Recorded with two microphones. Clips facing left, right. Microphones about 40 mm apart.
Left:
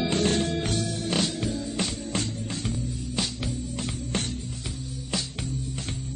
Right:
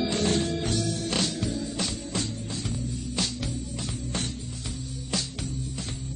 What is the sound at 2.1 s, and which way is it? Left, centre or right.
Music, left.